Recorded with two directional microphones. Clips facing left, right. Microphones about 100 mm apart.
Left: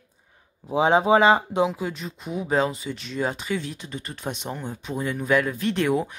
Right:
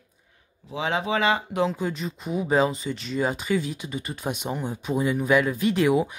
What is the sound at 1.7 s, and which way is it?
Speech, centre (ahead or behind).